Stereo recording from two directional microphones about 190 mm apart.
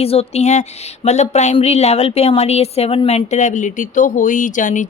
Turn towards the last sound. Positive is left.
turn(degrees=45)  # may be behind; listen again after turning